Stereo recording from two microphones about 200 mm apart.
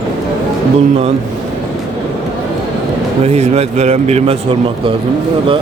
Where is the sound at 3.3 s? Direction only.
30° right (ahead or behind).